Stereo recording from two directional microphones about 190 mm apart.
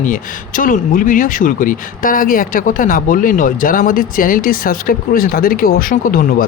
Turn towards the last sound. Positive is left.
turn(degrees=50)  # may be behind; listen again after turning